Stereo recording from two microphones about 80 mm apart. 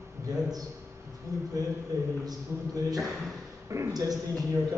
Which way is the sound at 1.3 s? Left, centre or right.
Right.